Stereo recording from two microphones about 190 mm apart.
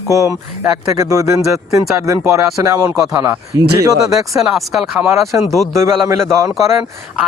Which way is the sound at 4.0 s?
Centre (ahead or behind).